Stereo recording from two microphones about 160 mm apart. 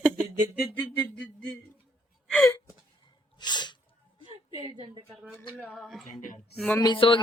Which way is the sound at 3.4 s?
30° left (ahead or behind).